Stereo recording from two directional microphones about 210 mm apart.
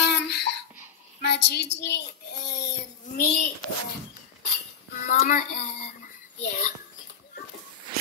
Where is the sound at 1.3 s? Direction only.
55° left (ahead or behind).